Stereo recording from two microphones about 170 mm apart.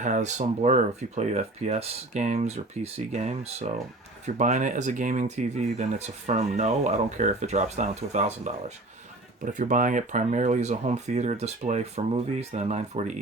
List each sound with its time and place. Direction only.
0.0 s speech: 45° right (ahead or behind)
9.4 s speech: 50° right (ahead or behind)